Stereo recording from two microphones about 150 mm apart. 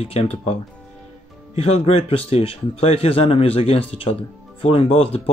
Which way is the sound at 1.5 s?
45° left (ahead or behind).